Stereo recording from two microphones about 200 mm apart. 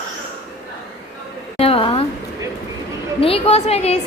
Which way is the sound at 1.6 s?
30° left (ahead or behind).